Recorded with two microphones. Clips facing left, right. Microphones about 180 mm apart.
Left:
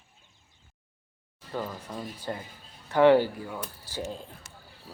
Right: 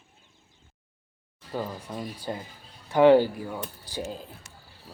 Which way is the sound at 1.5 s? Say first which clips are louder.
Right 2 dB; 10° right (ahead or behind).